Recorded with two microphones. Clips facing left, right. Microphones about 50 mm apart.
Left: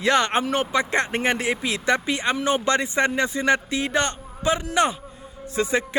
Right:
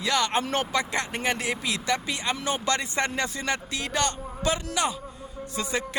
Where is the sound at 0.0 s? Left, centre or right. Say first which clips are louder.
Left 5 dB; left.